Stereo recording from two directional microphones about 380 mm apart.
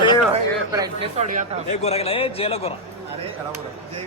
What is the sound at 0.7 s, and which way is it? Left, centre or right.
Speech, centre.